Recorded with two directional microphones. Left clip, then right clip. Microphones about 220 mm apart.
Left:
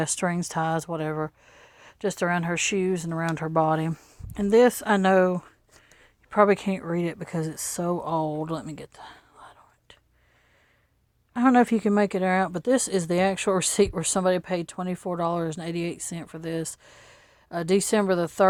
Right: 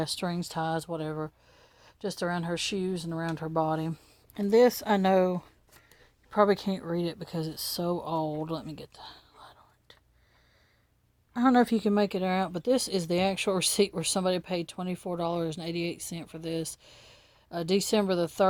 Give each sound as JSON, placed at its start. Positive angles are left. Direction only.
{"t": 0.0, "sound": "speech", "side_deg": 15}
{"t": 0.5, "sound": "speech", "side_deg": 30}
{"t": 11.3, "sound": "speech", "side_deg": 15}